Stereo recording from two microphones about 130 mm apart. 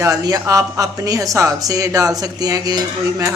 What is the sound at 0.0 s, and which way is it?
Speech, 25° right (ahead or behind).